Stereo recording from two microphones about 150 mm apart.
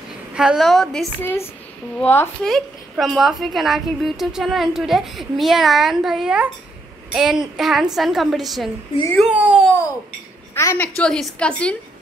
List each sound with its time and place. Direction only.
0.3 s a woman's voice: 5° right (ahead or behind)
1.2 s a woman's voice: 15° left (ahead or behind)
2.4 s a woman's voice: centre (ahead or behind)
10.5 s a woman's voice: 15° left (ahead or behind)
11.0 s a woman's voice: 5° left (ahead or behind)